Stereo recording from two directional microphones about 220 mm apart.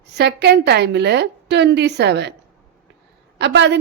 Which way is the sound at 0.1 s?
50° right (ahead or behind).